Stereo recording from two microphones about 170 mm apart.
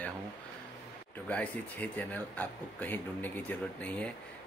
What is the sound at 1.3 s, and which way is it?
Speech, 10° left (ahead or behind).